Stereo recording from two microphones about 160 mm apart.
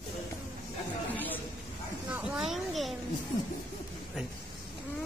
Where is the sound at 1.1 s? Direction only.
10° left (ahead or behind).